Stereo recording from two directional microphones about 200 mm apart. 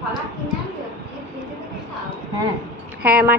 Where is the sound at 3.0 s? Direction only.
5° right (ahead or behind).